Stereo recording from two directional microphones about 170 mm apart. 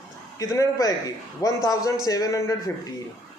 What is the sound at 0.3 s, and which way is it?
Speech, 20° left (ahead or behind).